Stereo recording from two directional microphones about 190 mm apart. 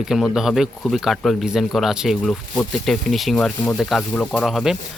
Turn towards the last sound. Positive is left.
turn(degrees=0)  # may be behind; listen again after turning